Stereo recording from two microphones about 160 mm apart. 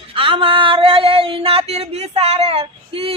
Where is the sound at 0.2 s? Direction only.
35° right (ahead or behind).